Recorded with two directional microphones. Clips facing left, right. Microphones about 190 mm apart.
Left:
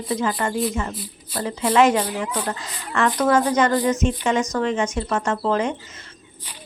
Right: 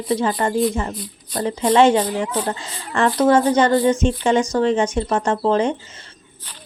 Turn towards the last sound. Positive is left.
turn(degrees=-30)  # may be behind; listen again after turning